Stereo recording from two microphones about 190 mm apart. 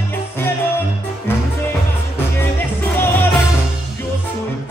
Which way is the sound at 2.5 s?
10° left (ahead or behind).